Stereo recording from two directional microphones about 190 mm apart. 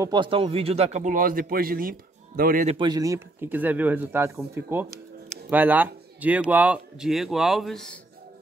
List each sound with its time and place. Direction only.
0.0 s a man's voice: 25° right (ahead or behind); by 2.8 s 40° right (ahead or behind)
2.8 s speech: 20° right (ahead or behind); by 8.0 s 5° left (ahead or behind)